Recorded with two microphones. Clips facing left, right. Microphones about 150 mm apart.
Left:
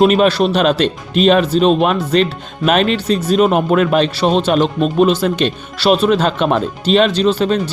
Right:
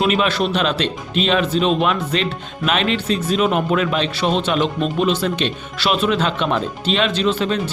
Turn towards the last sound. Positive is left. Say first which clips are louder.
# left 5 dB
turn(degrees=40)  # may be behind; listen again after turning